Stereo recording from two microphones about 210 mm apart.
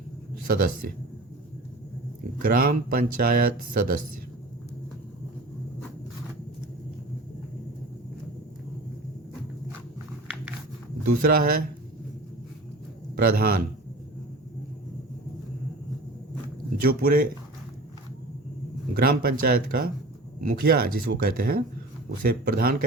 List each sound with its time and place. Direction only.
0.4 s speech: 45° right (ahead or behind)
2.4 s speech: 45° right (ahead or behind)
11.2 s speech: 45° right (ahead or behind)
13.1 s speech: 45° right (ahead or behind)
16.8 s speech: 45° right (ahead or behind)
18.9 s speech: 45° right (ahead or behind)